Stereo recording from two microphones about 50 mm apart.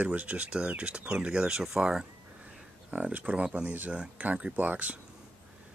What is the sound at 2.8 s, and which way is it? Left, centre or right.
Speech, right.